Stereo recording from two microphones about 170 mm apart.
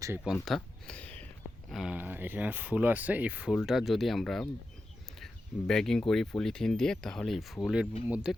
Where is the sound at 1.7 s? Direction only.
5° right (ahead or behind).